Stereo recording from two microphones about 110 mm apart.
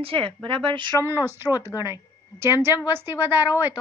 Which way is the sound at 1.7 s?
30° left (ahead or behind).